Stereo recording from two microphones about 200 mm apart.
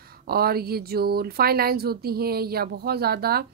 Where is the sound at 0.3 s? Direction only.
50° right (ahead or behind).